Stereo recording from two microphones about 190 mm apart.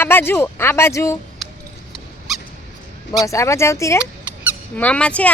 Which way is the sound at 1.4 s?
Centre (ahead or behind).